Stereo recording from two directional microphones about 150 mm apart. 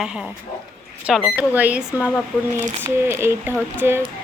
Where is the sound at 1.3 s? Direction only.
10° right (ahead or behind).